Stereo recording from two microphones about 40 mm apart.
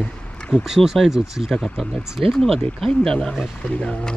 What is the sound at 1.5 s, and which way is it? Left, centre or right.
Speech, centre.